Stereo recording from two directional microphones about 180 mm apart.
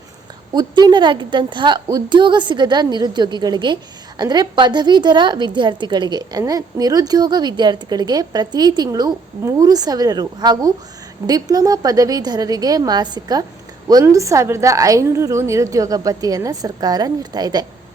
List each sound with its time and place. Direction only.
0.5 s a woman's voice: 25° right (ahead or behind)